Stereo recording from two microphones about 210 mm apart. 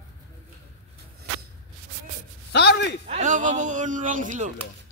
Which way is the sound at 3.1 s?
35° right (ahead or behind).